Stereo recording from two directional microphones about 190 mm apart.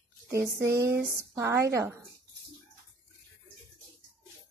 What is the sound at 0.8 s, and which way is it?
Speech, 15° right (ahead or behind).